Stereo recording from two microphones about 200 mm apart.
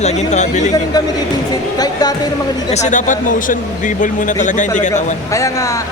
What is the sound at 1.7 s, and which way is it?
Speech, 20° left (ahead or behind).